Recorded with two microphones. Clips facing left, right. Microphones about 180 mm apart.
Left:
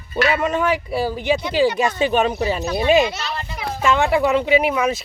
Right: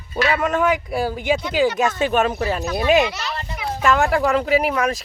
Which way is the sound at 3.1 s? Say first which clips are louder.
Left 1 dB; 25° left (ahead or behind).